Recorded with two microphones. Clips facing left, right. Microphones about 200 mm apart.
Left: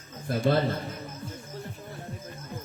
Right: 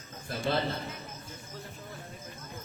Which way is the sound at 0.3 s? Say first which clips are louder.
Left 6 dB; 50° left (ahead or behind).